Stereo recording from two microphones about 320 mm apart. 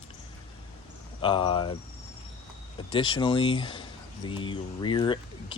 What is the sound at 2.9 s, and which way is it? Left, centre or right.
Speech, centre.